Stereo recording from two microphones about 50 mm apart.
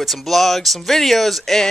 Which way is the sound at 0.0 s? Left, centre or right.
Centre.